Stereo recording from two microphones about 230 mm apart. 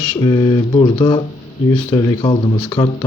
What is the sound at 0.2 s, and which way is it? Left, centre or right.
Speech, centre.